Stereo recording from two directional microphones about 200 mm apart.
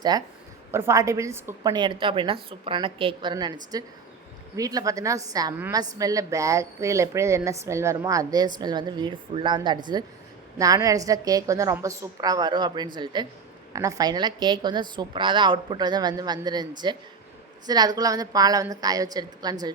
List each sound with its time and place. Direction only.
0.1 s a woman's voice: 20° right (ahead or behind)